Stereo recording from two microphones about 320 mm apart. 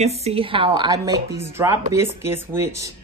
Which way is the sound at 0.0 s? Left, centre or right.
Centre.